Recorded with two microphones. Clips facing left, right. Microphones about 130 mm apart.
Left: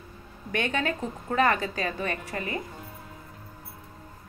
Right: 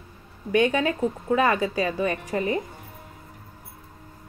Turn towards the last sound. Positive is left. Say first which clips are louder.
# right 7 dB
turn(degrees=-25)  # may be behind; listen again after turning